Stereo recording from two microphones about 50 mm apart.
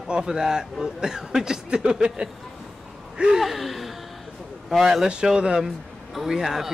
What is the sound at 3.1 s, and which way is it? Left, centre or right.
Gasp, centre.